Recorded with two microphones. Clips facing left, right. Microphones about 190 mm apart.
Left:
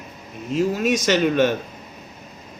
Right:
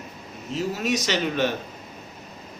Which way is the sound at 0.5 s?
50° left (ahead or behind).